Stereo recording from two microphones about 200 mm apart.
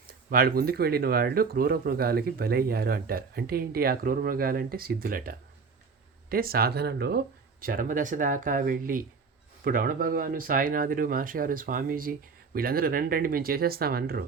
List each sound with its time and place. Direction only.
0.3 s speech: 45° right (ahead or behind)